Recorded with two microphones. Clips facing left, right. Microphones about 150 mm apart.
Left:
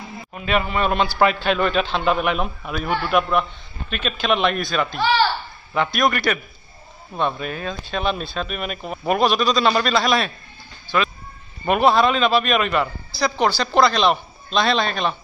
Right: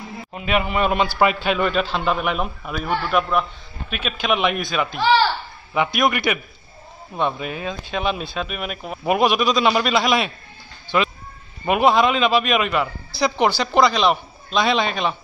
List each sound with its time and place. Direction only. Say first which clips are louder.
0.3 s a man's voice: even; 15° right (ahead or behind); by 3.4 s 5° left (ahead or behind)
3.9 s speech: left 1 dB; 10° right (ahead or behind)
13.2 s speech: right 1 dB; 15° right (ahead or behind)